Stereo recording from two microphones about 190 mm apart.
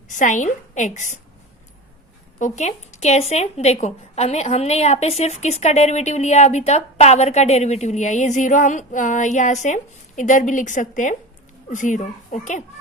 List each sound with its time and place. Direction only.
0.1 s a woman's voice: 40° left (ahead or behind)
2.4 s a woman's voice: 35° left (ahead or behind)